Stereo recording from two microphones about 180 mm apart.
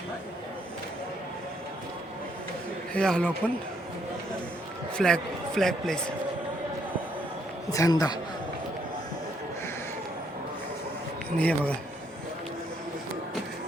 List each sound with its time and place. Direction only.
2.9 s a man's voice: 5° left (ahead or behind)
4.9 s a man's voice: 5° left (ahead or behind)
7.7 s a man's voice: 20° left (ahead or behind)
11.3 s speech: 5° left (ahead or behind)